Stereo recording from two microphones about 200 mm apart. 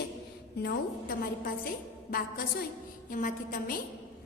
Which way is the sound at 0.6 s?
50° left (ahead or behind).